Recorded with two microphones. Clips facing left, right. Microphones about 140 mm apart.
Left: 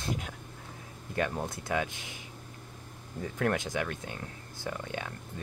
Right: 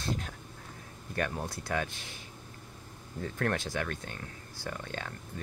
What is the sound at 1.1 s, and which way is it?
Speech, 20° left (ahead or behind).